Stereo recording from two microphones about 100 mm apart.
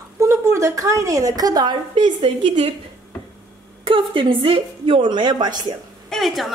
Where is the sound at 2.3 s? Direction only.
90° right.